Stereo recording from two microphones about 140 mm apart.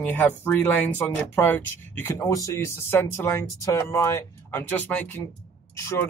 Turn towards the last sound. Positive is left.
turn(degrees=20)  # may be behind; listen again after turning